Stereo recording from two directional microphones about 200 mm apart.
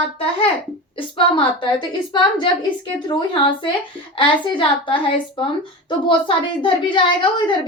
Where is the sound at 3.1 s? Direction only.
25° left (ahead or behind).